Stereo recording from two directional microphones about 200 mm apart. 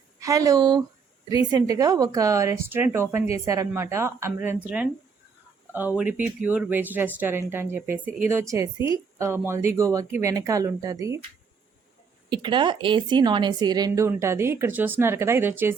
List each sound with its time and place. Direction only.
0.2 s speech: 15° right (ahead or behind)
6.1 s speech: 10° right (ahead or behind)
12.3 s speech: 25° right (ahead or behind)